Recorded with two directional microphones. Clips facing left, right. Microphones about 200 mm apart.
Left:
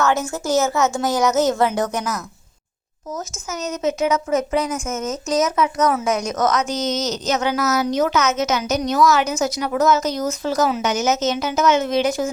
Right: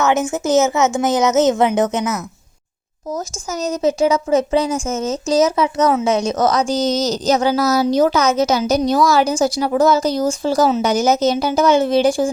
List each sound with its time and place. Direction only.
0.0 s speech: 20° right (ahead or behind)
3.2 s speech: 35° right (ahead or behind)